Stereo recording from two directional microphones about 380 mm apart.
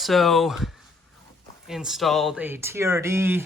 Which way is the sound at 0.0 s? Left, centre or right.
Centre.